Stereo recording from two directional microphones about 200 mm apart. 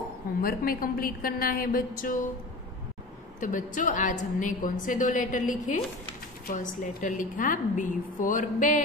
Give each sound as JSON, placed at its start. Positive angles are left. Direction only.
{"t": 0.4, "sound": "a woman's voice", "side_deg": 45}
{"t": 3.3, "sound": "a woman's voice", "side_deg": 40}